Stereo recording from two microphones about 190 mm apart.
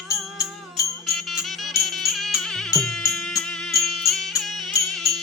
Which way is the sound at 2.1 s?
Centre (ahead or behind).